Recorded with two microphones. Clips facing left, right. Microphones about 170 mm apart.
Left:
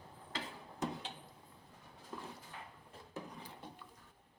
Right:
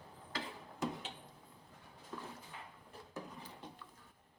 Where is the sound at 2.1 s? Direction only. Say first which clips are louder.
Even; 10° left (ahead or behind).